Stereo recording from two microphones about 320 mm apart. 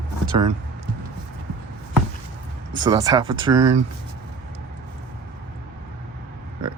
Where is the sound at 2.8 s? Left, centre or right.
Centre.